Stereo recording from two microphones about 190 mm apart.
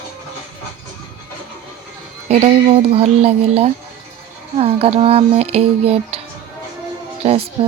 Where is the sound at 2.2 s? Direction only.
30° right (ahead or behind).